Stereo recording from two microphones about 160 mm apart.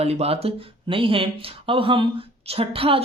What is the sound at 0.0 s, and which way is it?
Speech, 40° right (ahead or behind).